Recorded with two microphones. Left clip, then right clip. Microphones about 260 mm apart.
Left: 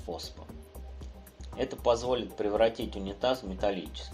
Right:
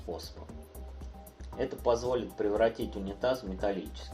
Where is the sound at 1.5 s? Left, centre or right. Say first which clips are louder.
Left 2 dB; left.